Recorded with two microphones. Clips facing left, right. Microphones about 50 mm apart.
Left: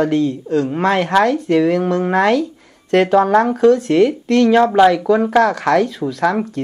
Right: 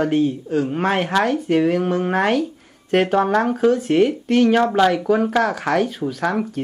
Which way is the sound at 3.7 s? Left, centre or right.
Left.